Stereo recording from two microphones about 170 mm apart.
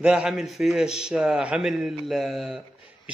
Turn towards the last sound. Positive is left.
turn(degrees=0)  # may be behind; listen again after turning